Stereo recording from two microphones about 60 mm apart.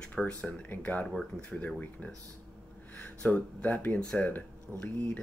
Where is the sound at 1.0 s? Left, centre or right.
Centre.